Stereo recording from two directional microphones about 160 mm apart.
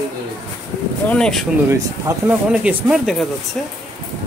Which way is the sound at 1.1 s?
5° left (ahead or behind).